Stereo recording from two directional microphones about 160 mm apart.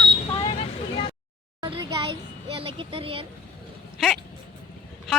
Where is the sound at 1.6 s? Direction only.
30° right (ahead or behind).